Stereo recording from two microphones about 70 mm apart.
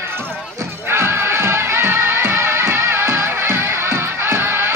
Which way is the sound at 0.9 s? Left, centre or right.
Right.